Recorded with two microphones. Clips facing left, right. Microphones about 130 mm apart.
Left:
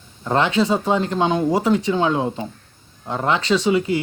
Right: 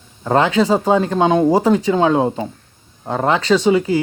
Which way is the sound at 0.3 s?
35° right (ahead or behind).